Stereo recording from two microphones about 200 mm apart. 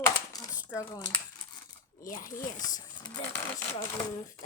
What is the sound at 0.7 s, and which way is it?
Speech, 15° left (ahead or behind).